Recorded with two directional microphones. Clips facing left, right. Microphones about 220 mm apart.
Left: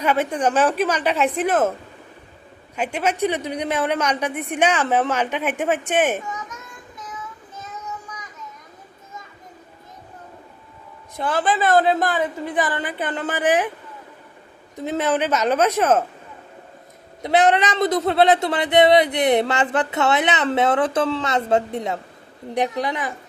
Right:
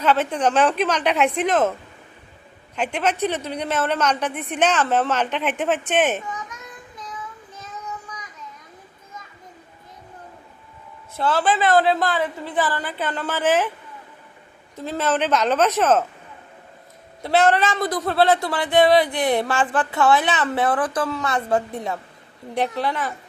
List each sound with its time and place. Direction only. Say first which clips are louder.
0.0 s speech: even; 10° left (ahead or behind)
2.7 s speech: even; 10° left (ahead or behind)
11.2 s speech: right 1 dB; 15° left (ahead or behind)
14.8 s speech: left 1 dB; 15° left (ahead or behind)
17.2 s speech: left 1 dB; 15° left (ahead or behind)